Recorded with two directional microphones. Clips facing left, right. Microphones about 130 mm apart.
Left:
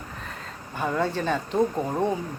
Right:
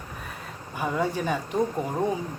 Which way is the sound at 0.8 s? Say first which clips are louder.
Left 1 dB; 10° right (ahead or behind).